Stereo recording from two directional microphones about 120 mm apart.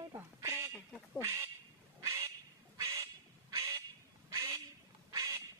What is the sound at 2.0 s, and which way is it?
Bird, 25° right (ahead or behind).